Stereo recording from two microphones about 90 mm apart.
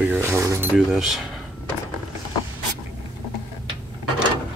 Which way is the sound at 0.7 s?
5° right (ahead or behind).